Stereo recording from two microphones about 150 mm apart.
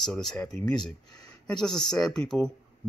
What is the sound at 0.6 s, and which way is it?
Speech, 30° left (ahead or behind).